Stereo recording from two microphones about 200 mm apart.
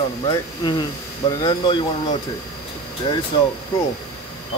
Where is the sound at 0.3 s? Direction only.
25° left (ahead or behind).